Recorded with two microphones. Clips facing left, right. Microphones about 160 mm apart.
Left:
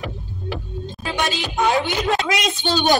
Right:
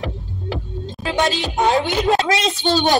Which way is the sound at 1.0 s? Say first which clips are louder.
Right 5 dB; 20° right (ahead or behind).